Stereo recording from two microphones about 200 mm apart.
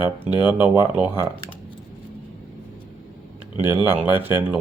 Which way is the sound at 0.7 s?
10° right (ahead or behind).